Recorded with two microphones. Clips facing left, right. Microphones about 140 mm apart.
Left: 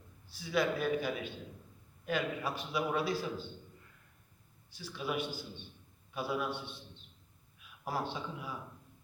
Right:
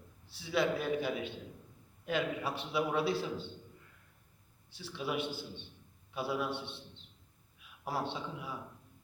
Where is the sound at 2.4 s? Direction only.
25° right (ahead or behind).